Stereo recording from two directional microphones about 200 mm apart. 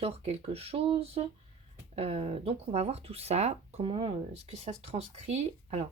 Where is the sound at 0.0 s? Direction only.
30° right (ahead or behind).